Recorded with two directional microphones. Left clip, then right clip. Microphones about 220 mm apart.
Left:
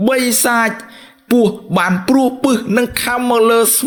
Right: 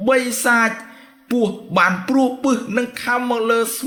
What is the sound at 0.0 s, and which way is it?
Speech, 30° left (ahead or behind).